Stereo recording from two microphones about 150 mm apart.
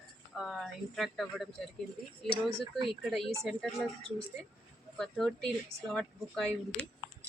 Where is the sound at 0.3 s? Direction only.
Centre (ahead or behind).